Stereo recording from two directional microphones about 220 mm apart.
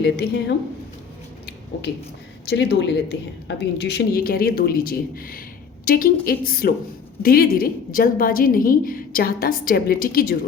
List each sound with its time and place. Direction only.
0.0 s a woman's voice: 50° left (ahead or behind)
2.5 s a woman's voice: 50° left (ahead or behind)